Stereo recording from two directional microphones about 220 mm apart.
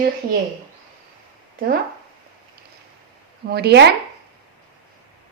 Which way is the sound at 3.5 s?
45° right (ahead or behind).